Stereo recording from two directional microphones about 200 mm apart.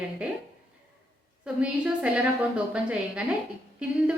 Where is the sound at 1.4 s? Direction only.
5° right (ahead or behind).